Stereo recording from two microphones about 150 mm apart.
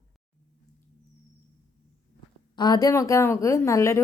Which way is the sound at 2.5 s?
30° left (ahead or behind).